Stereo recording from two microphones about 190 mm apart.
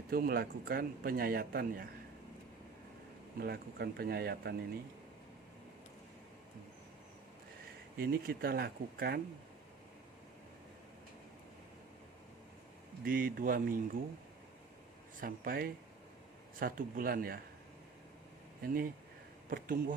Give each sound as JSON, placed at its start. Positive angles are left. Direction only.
{"t": 0.1, "sound": "speech", "side_deg": -50}
{"t": 3.3, "sound": "speech", "side_deg": -55}
{"t": 7.9, "sound": "speech", "side_deg": -50}
{"t": 13.1, "sound": "speech", "side_deg": -50}
{"t": 15.2, "sound": "speech", "side_deg": -50}
{"t": 18.6, "sound": "speech", "side_deg": -50}